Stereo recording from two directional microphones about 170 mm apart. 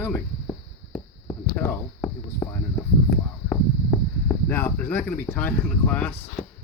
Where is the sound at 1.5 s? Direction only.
15° left (ahead or behind).